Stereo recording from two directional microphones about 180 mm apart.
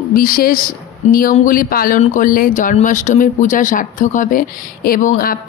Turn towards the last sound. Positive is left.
turn(degrees=50)  # may be behind; listen again after turning